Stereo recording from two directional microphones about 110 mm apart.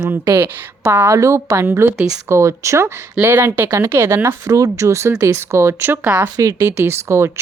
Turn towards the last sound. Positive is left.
turn(degrees=-25)  # may be behind; listen again after turning